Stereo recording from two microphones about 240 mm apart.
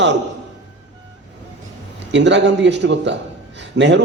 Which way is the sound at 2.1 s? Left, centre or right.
Right.